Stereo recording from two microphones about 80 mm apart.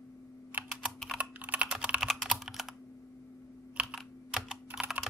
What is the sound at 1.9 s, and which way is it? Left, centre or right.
Typing, centre.